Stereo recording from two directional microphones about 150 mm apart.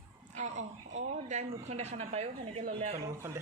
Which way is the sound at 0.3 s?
50° right (ahead or behind).